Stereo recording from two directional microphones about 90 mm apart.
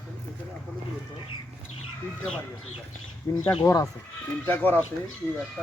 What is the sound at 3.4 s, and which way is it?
Speech, 80° left.